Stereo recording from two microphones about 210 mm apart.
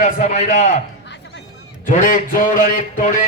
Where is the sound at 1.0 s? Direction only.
55° left (ahead or behind).